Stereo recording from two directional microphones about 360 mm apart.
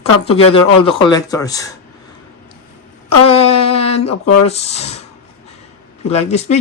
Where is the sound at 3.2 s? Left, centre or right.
Centre.